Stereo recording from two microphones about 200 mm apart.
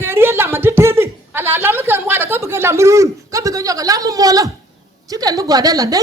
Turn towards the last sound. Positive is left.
turn(degrees=-15)  # may be behind; listen again after turning